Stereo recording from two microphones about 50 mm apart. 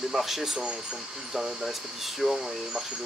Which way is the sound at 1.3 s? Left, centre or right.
Centre.